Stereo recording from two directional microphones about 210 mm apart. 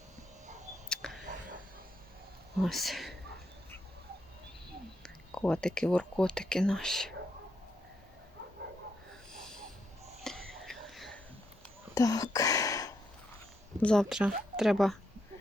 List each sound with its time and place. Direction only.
0.9 s a sound: centre (ahead or behind)
2.6 s speech: centre (ahead or behind)
5.0 s speech: 5° left (ahead or behind)
10.2 s whispering: centre (ahead or behind)
11.9 s a sound: 15° left (ahead or behind)
13.8 s speech: centre (ahead or behind)